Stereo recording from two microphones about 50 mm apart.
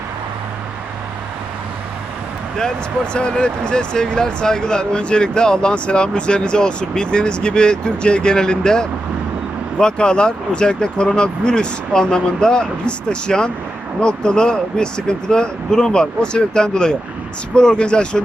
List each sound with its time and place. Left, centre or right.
2.6 s speech: centre